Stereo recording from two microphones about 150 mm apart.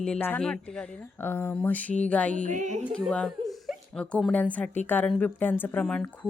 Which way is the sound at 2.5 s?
55° right (ahead or behind).